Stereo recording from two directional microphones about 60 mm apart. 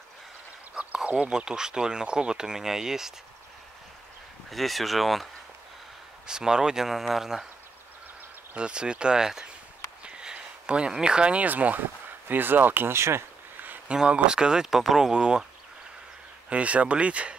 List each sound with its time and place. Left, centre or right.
1.2 s speech: centre
4.5 s speech: centre
6.2 s speech: centre
8.5 s speech: centre; by 13.2 s right
13.6 s a sound: right
13.9 s speech: centre
16.4 s speech: right